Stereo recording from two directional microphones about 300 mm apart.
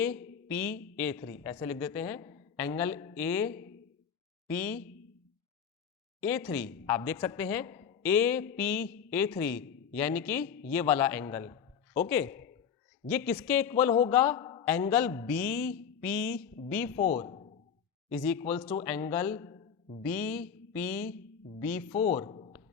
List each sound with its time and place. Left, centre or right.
0.0 s a woman's voice: centre
6.2 s a woman's voice: centre
17.0 s speech: left
18.3 s a woman's voice: centre
21.9 s a man's voice: left